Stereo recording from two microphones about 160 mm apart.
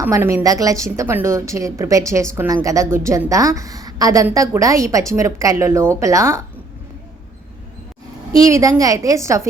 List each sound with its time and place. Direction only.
0.0 s a woman's voice: 15° right (ahead or behind)
8.3 s a woman's voice: 20° right (ahead or behind)